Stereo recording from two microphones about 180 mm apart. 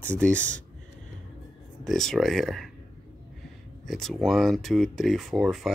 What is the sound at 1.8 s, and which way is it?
Speech, centre (ahead or behind).